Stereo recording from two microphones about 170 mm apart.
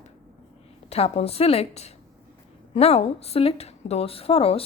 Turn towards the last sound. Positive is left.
turn(degrees=35)  # may be behind; listen again after turning